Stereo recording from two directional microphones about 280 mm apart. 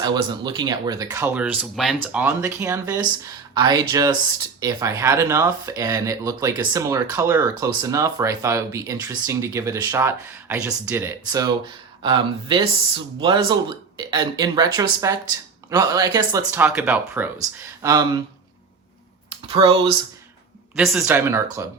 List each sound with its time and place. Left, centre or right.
0.0 s speech: centre
19.5 s speech: centre
20.7 s speech: centre